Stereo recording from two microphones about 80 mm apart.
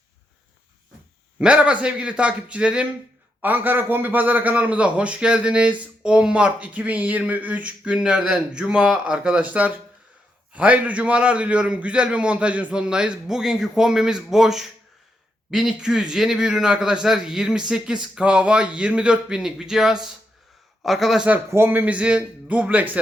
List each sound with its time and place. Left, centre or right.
1.4 s a man's voice: centre
21.5 s a man's voice: right